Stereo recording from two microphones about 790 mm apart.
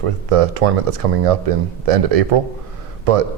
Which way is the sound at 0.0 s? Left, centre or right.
Right.